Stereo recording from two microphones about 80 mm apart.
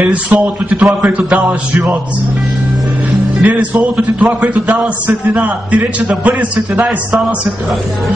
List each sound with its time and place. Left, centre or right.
0.0 s a man's voice: centre
3.4 s a man's voice: centre